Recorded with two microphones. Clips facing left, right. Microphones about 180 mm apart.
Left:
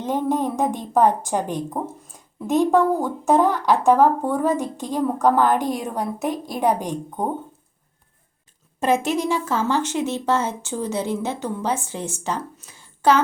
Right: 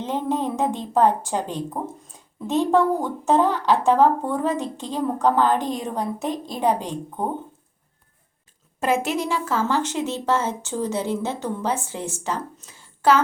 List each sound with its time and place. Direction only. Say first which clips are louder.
0.0 s speech: left 2 dB; 15° left (ahead or behind)
8.8 s speech: left 2 dB; 20° left (ahead or behind)
12.5 s a sound: even; 15° left (ahead or behind)